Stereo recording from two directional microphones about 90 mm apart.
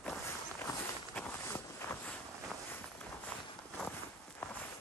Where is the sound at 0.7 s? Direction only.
45° left (ahead or behind).